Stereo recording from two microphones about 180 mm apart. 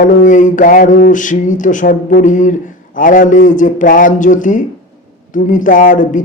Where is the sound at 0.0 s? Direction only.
45° left (ahead or behind).